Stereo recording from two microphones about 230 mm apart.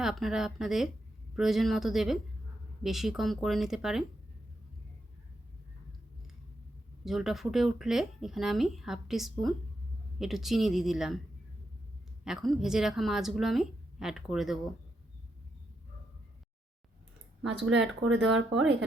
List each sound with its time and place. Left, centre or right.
0.0 s speech: centre
7.0 s speech: centre
12.2 s speech: centre
17.7 s speech: right